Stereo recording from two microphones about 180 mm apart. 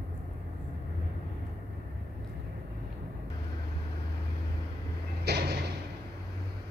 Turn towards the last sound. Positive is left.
turn(degrees=-65)  # may be behind; listen again after turning